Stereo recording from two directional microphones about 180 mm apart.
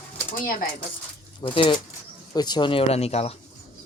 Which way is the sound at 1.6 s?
25° left (ahead or behind).